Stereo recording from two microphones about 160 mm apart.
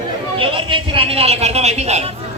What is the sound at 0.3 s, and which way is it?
A man's voice, 35° right (ahead or behind).